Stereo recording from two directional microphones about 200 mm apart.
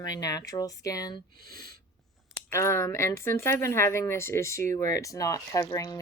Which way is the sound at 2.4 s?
15° left (ahead or behind).